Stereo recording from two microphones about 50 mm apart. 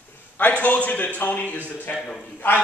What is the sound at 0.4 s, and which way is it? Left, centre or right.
A man's voice, left.